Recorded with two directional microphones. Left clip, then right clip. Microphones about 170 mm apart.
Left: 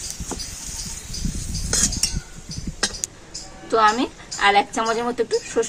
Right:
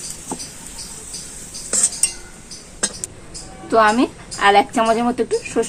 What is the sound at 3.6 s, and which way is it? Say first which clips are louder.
A woman's voice: right 3 dB; 40° right (ahead or behind).